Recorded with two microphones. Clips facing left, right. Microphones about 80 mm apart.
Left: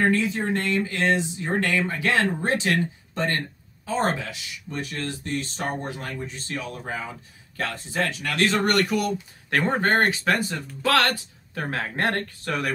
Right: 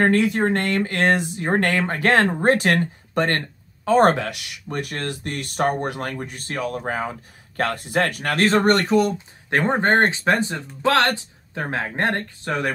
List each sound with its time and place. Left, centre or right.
0.0 s speech: right